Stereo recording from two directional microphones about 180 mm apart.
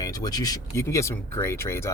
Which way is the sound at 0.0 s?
20° left (ahead or behind).